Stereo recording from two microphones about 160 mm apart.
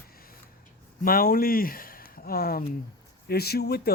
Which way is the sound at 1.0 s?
65° left (ahead or behind).